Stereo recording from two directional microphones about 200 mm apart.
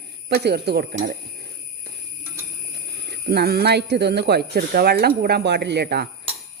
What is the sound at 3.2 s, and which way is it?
Speech, 50° right (ahead or behind).